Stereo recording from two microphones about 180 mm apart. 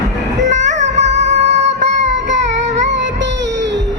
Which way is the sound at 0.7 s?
40° right (ahead or behind).